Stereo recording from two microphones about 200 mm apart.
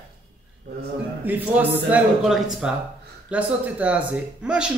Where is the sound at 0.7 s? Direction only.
55° right (ahead or behind).